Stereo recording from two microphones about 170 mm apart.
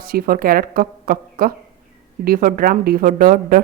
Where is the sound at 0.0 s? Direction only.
60° right (ahead or behind).